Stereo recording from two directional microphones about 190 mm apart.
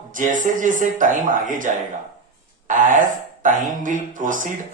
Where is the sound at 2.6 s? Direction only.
40° right (ahead or behind).